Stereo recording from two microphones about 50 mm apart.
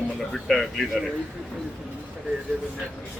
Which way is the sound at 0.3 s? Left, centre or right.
Centre.